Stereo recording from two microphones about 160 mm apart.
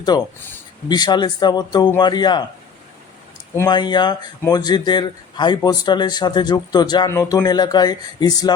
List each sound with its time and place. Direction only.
0.1 s speech: 25° left (ahead or behind)
3.5 s speech: 15° left (ahead or behind)
3.8 s speech: 30° left (ahead or behind)